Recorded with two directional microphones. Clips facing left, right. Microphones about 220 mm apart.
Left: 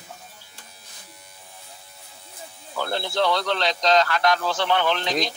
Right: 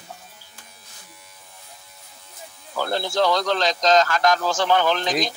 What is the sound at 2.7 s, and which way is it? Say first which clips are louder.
Speech: right 2 dB; 40° right (ahead or behind).